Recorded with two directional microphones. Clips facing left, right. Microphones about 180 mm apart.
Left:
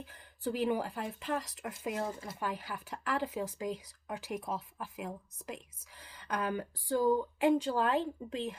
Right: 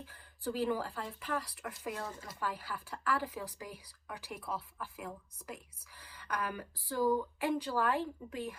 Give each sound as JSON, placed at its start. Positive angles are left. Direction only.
{"t": 0.0, "sound": "a woman's voice", "side_deg": 20}